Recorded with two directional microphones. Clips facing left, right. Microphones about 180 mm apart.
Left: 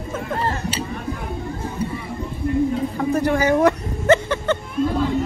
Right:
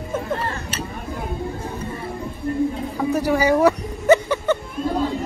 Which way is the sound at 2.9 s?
5° right (ahead or behind).